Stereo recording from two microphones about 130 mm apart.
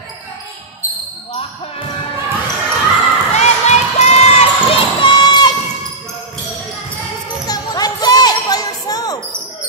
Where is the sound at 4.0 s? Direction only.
55° left (ahead or behind).